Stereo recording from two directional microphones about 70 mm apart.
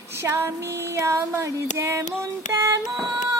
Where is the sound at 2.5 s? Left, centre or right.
Right.